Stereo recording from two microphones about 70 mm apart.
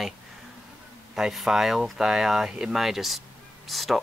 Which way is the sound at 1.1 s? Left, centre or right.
Centre.